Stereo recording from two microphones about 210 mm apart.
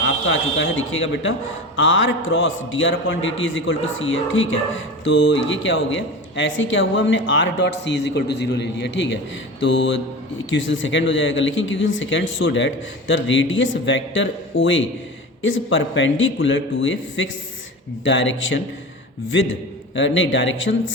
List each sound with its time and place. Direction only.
0.0 s a man's voice: 65° left (ahead or behind)